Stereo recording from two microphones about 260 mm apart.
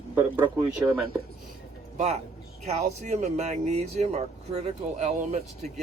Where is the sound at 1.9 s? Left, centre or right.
Right.